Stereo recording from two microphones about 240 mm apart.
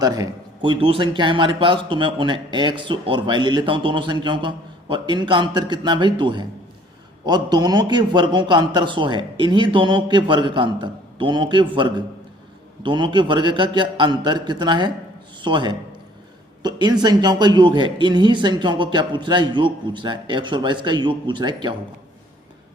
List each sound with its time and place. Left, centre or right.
0.0 s a man's voice: centre